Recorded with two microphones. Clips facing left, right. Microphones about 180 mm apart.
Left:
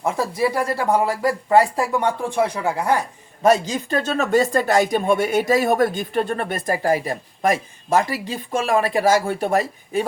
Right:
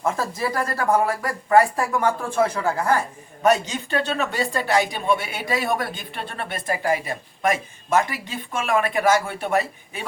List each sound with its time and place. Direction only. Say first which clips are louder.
0.0 s speech: left 4 dB; 10° left (ahead or behind)
3.4 s speech: left 3 dB; 35° left (ahead or behind)